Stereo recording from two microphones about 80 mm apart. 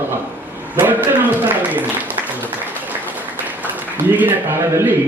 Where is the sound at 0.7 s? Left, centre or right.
Right.